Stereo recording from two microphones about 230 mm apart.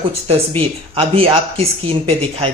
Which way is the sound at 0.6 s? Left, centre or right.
Right.